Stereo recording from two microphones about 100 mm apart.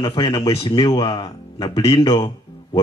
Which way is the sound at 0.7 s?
55° left (ahead or behind).